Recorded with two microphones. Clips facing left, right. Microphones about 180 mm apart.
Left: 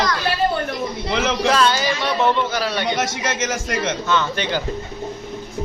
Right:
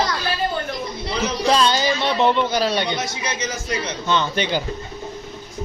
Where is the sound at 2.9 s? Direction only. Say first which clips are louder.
Left 4 dB; 90° left.